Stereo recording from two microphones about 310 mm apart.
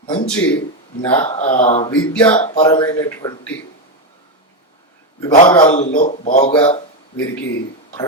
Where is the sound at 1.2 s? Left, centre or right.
Left.